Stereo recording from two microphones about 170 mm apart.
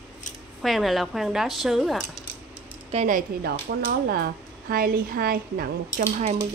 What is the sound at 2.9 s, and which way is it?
Speech, 45° right (ahead or behind).